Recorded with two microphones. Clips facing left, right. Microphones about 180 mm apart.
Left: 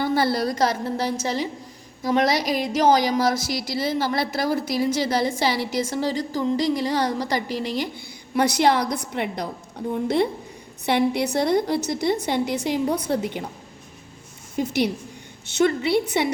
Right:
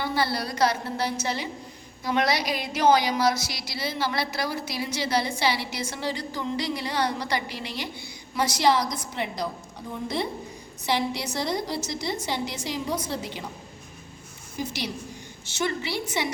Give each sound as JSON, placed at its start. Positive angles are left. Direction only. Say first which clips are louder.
{"t": 0.0, "sound": "a woman's voice", "louder": "left 6 dB", "side_deg": 50}
{"t": 8.4, "sound": "a woman's voice", "louder": "left 4 dB", "side_deg": 60}
{"t": 15.5, "sound": "a woman's voice", "louder": "left 9 dB", "side_deg": 60}